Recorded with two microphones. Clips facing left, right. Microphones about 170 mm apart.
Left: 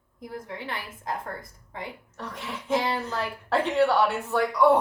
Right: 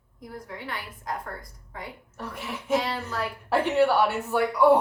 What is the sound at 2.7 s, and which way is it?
Speech, 25° left (ahead or behind).